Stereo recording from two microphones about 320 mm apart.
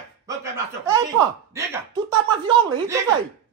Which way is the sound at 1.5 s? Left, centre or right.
Centre.